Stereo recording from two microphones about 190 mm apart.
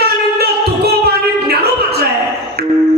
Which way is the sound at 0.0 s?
55° right (ahead or behind).